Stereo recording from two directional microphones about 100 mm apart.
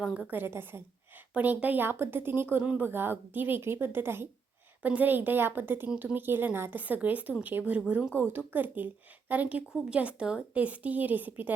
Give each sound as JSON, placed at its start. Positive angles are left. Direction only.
{"t": 0.0, "sound": "a woman's voice", "side_deg": -10}
{"t": 0.3, "sound": "a woman's voice", "side_deg": -20}
{"t": 5.9, "sound": "a woman's voice", "side_deg": -10}
{"t": 6.1, "sound": "a woman's voice", "side_deg": -20}